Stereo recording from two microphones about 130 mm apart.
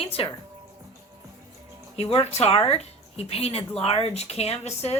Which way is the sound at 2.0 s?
50° left (ahead or behind).